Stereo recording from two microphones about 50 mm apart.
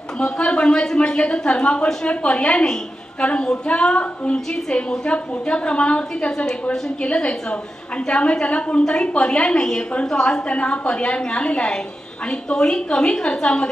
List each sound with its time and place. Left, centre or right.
0.2 s a woman's voice: centre